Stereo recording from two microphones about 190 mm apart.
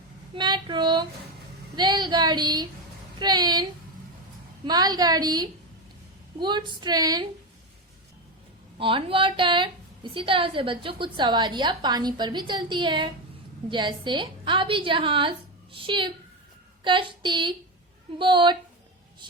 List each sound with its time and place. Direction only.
0.3 s a woman's voice: 25° right (ahead or behind)
8.8 s a woman's voice: 25° right (ahead or behind)